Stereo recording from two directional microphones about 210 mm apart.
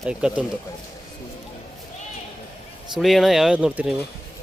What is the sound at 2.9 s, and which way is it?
Speech, centre (ahead or behind).